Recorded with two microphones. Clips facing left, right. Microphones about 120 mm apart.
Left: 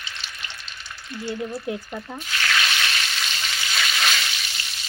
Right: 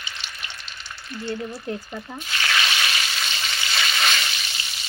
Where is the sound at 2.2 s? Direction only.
5° right (ahead or behind).